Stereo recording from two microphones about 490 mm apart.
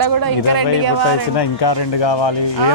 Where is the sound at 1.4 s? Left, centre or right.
Left.